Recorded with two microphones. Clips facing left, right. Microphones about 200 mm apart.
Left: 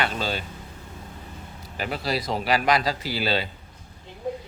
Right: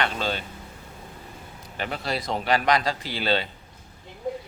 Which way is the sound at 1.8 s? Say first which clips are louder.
Left 2 dB; 5° left (ahead or behind).